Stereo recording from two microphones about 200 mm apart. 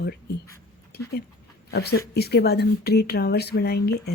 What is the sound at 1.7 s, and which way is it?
Speech, 55° left (ahead or behind).